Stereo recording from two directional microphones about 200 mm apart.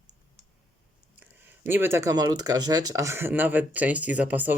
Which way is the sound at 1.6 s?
10° right (ahead or behind).